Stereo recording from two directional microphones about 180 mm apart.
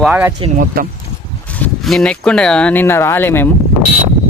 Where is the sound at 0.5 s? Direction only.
50° right (ahead or behind).